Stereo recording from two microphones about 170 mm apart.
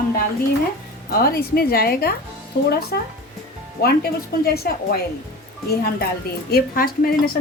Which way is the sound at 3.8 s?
65° left (ahead or behind).